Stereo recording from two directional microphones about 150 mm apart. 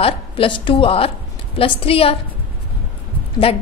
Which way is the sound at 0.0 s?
35° left (ahead or behind).